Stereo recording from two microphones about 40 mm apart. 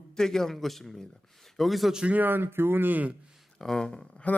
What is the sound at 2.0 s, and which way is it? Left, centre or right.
Speech, right.